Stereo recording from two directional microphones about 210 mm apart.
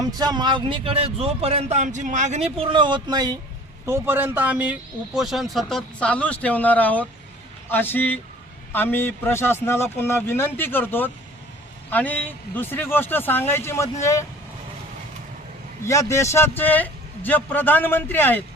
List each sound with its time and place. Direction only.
0.0 s a man's voice: 20° right (ahead or behind); by 14.3 s 15° left (ahead or behind)
15.8 s speech: 15° left (ahead or behind)